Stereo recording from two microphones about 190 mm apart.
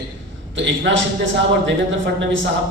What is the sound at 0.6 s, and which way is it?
A man's voice, 75° right (ahead or behind).